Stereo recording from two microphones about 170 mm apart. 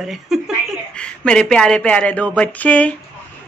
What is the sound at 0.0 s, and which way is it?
A man's voice, centre (ahead or behind).